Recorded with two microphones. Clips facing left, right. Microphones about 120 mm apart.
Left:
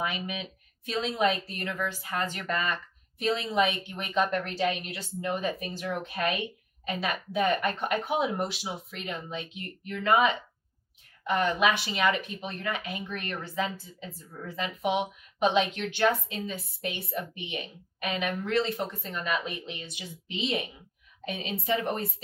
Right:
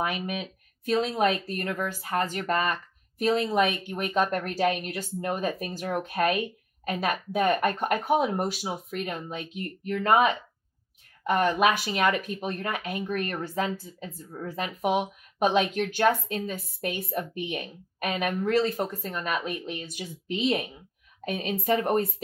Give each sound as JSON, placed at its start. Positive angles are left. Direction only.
{"t": 0.0, "sound": "speech", "side_deg": -50}